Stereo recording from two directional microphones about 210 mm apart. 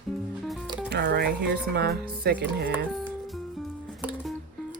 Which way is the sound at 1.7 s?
50° right (ahead or behind).